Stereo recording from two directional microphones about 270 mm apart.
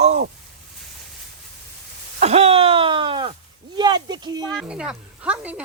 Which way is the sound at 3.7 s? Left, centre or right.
Centre.